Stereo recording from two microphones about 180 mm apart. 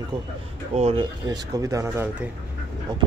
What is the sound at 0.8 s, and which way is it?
Speech, 35° right (ahead or behind).